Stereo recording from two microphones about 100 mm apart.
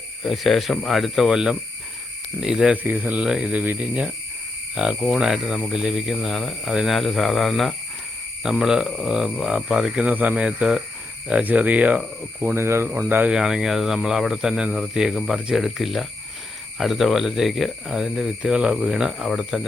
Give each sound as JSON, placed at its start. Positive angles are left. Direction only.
{"t": 0.2, "sound": "speech", "side_deg": 0}
{"t": 2.7, "sound": "speech", "side_deg": -15}
{"t": 12.5, "sound": "speech", "side_deg": -25}
{"t": 13.3, "sound": "speech", "side_deg": -5}